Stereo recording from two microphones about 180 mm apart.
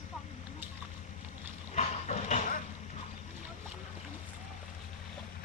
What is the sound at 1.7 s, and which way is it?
Speech, 35° left (ahead or behind).